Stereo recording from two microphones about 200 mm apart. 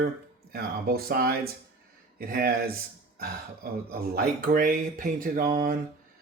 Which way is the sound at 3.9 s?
50° right (ahead or behind).